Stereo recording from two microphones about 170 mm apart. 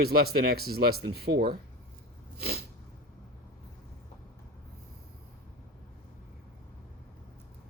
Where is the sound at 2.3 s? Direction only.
65° right (ahead or behind).